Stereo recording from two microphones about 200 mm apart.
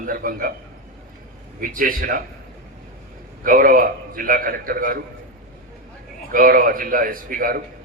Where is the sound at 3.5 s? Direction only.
45° right (ahead or behind).